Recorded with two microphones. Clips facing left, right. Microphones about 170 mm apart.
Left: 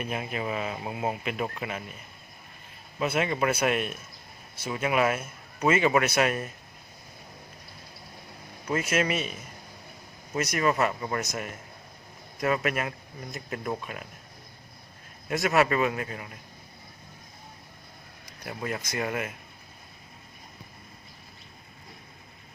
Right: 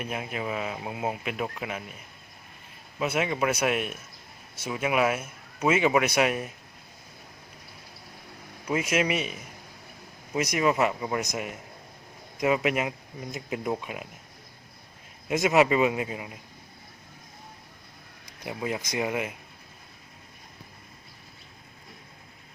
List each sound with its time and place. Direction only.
0.0 s speech: 5° right (ahead or behind)
3.0 s a man's voice: 5° right (ahead or behind)
8.6 s a man's voice: 10° right (ahead or behind)
15.3 s a man's voice: 15° right (ahead or behind)
18.4 s a man's voice: 15° right (ahead or behind)